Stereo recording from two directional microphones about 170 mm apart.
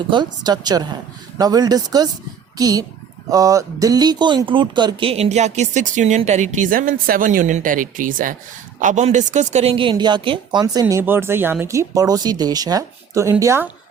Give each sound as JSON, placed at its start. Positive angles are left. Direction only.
{"t": 0.1, "sound": "a woman's voice", "side_deg": -25}